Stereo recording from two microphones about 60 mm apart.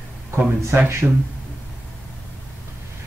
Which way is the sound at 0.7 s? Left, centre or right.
Right.